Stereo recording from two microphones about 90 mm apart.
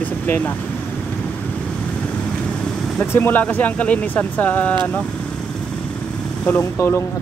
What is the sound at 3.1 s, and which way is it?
Speech, 20° left (ahead or behind).